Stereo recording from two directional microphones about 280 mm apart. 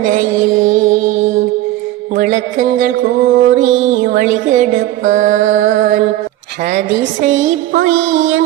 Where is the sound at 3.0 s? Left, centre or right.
Right.